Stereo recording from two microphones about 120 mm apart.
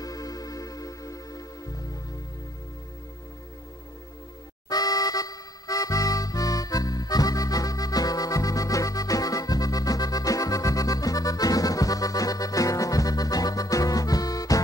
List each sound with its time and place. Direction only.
0.0 s music: 30° left (ahead or behind)
4.6 s accordion: 30° left (ahead or behind)